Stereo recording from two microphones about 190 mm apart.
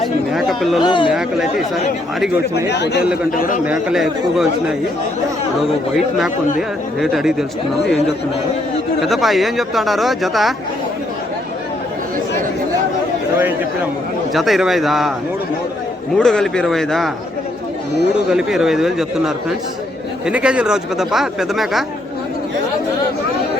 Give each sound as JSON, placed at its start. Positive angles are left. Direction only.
{"t": 0.3, "sound": "a sound", "side_deg": 0}
{"t": 0.8, "sound": "speech", "side_deg": 25}
{"t": 1.1, "sound": "speech", "side_deg": 0}
{"t": 2.6, "sound": "speech", "side_deg": 65}
{"t": 3.3, "sound": "a man's voice", "side_deg": 45}
{"t": 3.7, "sound": "speech", "side_deg": 0}
{"t": 6.6, "sound": "speech", "side_deg": 0}
{"t": 14.3, "sound": "speech", "side_deg": 0}
{"t": 16.1, "sound": "speech", "side_deg": 5}
{"t": 18.3, "sound": "speech", "side_deg": -5}